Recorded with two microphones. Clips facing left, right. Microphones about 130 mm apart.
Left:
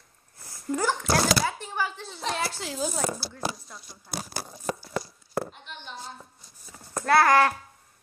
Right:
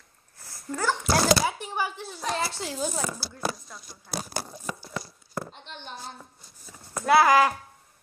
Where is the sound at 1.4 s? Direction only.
15° right (ahead or behind).